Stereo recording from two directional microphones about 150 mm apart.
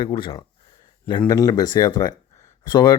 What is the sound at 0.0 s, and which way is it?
Speech, 35° left (ahead or behind).